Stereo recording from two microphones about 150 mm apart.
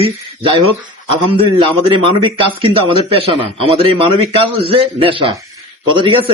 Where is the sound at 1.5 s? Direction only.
35° right (ahead or behind).